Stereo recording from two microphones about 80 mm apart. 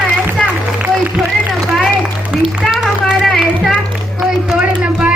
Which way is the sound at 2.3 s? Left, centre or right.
Centre.